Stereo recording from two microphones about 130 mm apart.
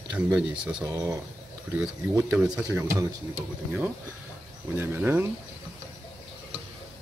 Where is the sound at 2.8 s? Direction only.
20° right (ahead or behind).